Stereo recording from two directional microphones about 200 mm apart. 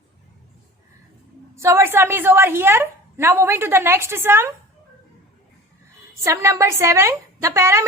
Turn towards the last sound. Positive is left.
turn(degrees=-15)  # may be behind; listen again after turning